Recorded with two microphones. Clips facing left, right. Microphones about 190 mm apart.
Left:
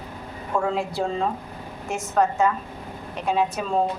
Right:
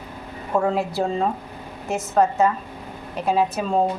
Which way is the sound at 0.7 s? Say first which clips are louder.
Right 2 dB; 5° right (ahead or behind).